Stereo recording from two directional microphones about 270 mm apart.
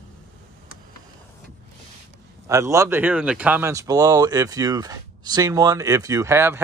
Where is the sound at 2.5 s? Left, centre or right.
Centre.